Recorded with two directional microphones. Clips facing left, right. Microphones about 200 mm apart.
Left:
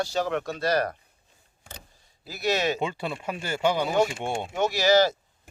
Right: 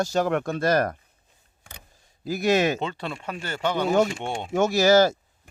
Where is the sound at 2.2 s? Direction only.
50° right (ahead or behind).